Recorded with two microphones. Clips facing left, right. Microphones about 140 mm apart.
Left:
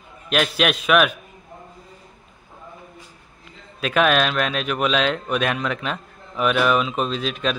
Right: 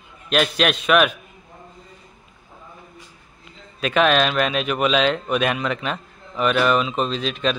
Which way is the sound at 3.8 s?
Centre (ahead or behind).